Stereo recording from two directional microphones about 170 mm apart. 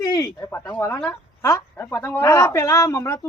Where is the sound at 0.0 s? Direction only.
20° left (ahead or behind).